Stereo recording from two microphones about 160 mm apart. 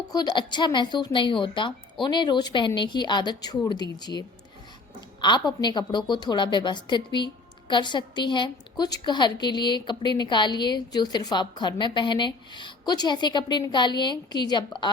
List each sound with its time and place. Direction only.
0.1 s a woman's voice: 25° left (ahead or behind)
5.2 s a woman's voice: 30° left (ahead or behind)